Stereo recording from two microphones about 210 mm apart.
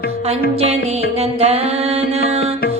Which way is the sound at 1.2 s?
30° right (ahead or behind).